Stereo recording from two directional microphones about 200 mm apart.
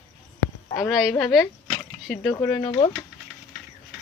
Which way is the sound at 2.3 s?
15° left (ahead or behind).